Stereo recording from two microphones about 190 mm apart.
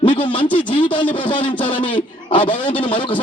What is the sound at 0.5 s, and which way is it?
Speech, 25° left (ahead or behind).